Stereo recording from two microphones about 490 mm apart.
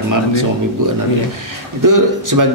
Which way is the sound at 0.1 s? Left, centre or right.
Right.